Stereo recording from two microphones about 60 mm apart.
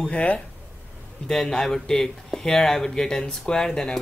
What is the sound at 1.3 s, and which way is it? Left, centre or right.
Speech, centre.